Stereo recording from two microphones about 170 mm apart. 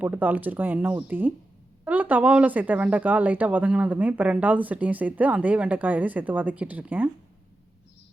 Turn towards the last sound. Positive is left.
turn(degrees=-10)  # may be behind; listen again after turning